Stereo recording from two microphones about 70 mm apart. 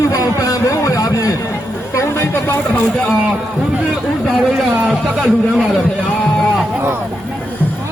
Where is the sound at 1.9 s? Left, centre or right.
Left.